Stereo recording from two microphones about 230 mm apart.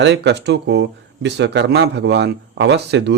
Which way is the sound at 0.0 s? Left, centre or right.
Right.